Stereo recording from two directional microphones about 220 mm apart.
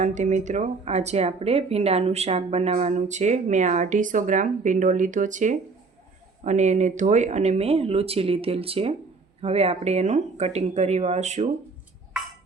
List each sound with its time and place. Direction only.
0.0 s speech: 35° right (ahead or behind)